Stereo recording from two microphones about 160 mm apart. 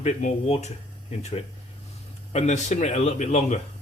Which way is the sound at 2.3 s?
45° left (ahead or behind).